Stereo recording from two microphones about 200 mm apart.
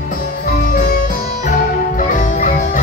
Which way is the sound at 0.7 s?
45° left (ahead or behind).